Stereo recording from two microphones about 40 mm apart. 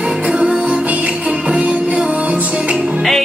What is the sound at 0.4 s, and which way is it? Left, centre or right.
Music, right.